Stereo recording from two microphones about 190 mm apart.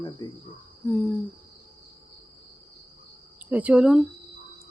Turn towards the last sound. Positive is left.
turn(degrees=-5)  # may be behind; listen again after turning